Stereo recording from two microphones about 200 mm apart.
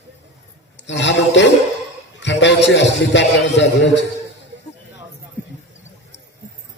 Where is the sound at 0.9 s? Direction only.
60° left (ahead or behind).